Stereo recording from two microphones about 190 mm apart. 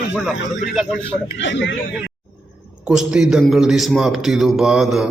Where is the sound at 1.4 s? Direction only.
70° left (ahead or behind).